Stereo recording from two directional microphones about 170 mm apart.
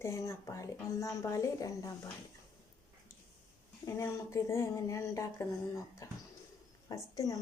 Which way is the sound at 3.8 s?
15° left (ahead or behind).